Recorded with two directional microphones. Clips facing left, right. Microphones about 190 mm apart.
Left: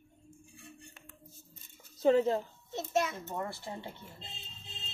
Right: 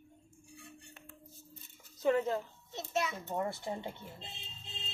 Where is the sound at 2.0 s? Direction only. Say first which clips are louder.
Left 4 dB; 30° left (ahead or behind).